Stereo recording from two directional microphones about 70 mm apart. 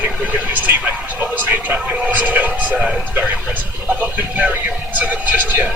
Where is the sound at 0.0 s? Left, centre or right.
Right.